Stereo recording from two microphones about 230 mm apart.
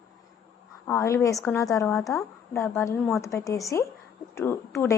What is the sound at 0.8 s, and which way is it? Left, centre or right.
A woman's voice, centre.